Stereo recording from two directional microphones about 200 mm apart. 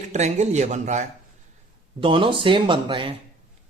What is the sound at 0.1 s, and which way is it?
Speech, 35° right (ahead or behind).